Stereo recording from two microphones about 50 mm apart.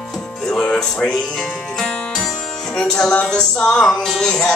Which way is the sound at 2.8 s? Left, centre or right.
Centre.